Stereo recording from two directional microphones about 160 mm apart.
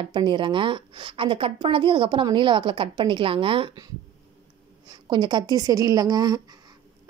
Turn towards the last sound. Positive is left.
turn(degrees=-25)  # may be behind; listen again after turning